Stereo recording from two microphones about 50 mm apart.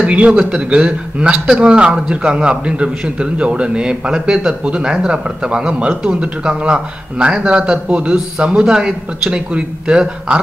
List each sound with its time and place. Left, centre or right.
0.0 s speech: right